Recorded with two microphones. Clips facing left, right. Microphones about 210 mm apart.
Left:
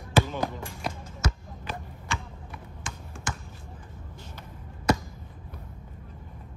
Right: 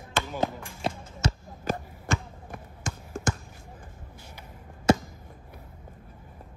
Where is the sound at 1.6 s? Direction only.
45° right (ahead or behind).